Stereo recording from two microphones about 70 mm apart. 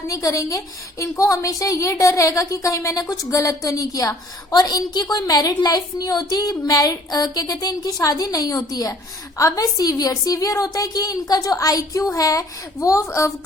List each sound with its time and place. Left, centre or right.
0.1 s a woman's voice: left
4.5 s a woman's voice: left